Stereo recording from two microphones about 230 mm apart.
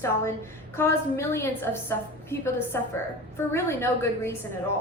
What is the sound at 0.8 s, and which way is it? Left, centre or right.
A woman's voice, centre.